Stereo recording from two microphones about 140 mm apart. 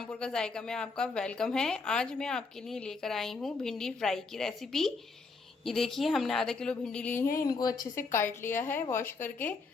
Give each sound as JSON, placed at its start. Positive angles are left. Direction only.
{"t": 0.0, "sound": "a woman's voice", "side_deg": 5}
{"t": 7.4, "sound": "speech", "side_deg": 30}
{"t": 7.9, "sound": "a woman's voice", "side_deg": 15}